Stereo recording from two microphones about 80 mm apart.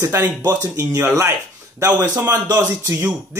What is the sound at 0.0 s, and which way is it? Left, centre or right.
Speech, right.